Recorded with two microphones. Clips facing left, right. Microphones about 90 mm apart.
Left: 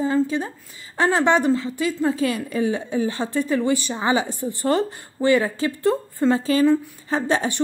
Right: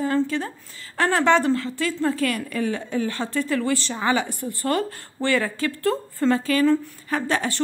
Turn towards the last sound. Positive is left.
turn(degrees=20)  # may be behind; listen again after turning